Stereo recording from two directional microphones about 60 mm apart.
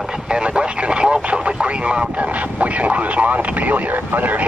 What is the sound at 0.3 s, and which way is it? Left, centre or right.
Speech, centre.